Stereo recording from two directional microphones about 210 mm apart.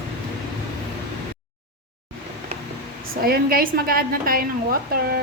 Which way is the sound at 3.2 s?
45° right (ahead or behind).